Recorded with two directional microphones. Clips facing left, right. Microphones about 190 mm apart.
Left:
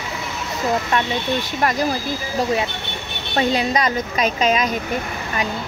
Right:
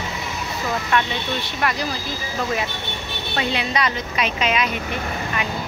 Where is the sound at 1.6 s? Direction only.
45° left (ahead or behind).